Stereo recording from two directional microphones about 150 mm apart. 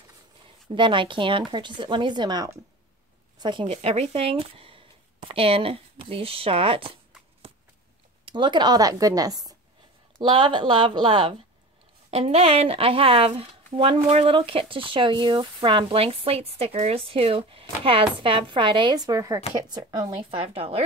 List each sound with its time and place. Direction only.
0.7 s speech: 35° right (ahead or behind)
8.3 s a woman's voice: 30° right (ahead or behind)
12.1 s a woman's voice: 45° right (ahead or behind)
20.2 s speech: 40° right (ahead or behind)